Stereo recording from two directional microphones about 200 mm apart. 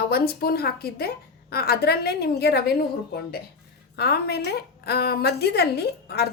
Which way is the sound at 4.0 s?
55° left (ahead or behind).